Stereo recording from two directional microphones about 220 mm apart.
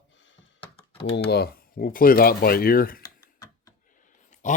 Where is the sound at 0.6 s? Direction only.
25° left (ahead or behind).